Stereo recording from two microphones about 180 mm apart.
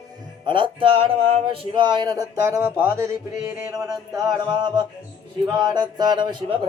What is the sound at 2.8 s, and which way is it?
Mantra, 15° right (ahead or behind).